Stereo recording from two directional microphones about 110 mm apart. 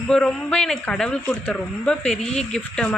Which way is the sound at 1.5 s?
5° left (ahead or behind).